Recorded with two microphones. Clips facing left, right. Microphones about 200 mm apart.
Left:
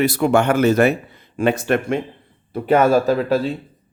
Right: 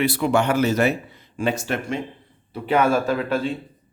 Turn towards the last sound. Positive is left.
turn(degrees=40)  # may be behind; listen again after turning